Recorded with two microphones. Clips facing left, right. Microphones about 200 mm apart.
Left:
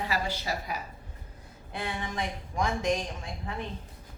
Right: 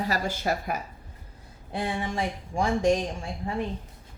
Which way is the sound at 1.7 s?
30° right (ahead or behind).